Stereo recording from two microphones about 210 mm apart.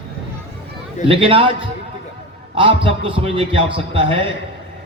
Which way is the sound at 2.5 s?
25° right (ahead or behind).